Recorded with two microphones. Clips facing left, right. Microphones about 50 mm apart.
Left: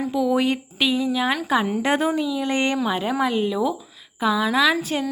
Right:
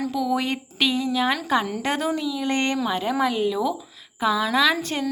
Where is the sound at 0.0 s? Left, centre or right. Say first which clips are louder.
Left 3 dB; centre.